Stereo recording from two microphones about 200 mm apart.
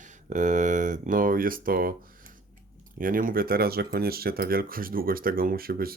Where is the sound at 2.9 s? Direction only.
45° right (ahead or behind).